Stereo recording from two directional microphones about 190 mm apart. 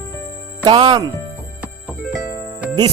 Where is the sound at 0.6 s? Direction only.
25° right (ahead or behind).